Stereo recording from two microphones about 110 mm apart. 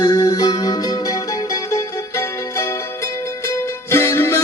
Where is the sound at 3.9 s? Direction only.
25° left (ahead or behind).